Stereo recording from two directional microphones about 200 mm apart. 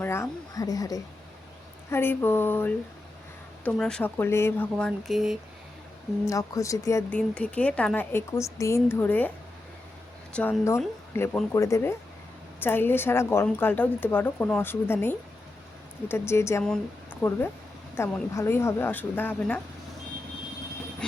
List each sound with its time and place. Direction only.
0.0 s a woman's voice: 10° left (ahead or behind)
6.2 s a woman's voice: 15° left (ahead or behind)
10.3 s a woman's voice: 5° left (ahead or behind)